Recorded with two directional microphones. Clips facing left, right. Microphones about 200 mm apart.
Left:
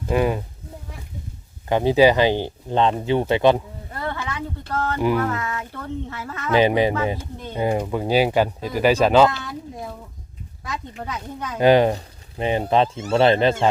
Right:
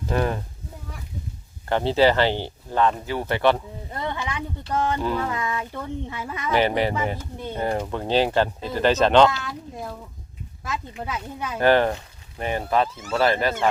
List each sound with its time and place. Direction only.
0.1 s speech: 10° left (ahead or behind)
1.6 s speech: 15° left (ahead or behind)
3.9 s a sound: 20° right (ahead or behind)
4.7 s speech: 15° right (ahead or behind)
4.9 s speech: 15° left (ahead or behind)
5.2 s speech: 15° right (ahead or behind)
6.5 s speech: 15° left (ahead or behind); by 11.5 s 5° right (ahead or behind)
11.5 s speech: 15° left (ahead or behind)